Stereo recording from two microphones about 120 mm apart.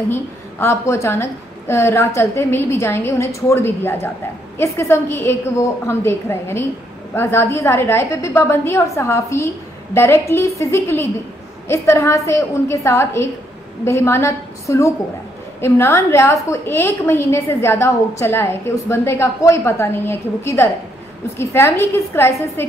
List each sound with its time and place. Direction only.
0.1 s a woman's voice: 20° left (ahead or behind)